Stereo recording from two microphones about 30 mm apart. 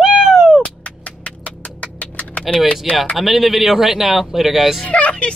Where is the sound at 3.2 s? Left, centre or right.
Centre.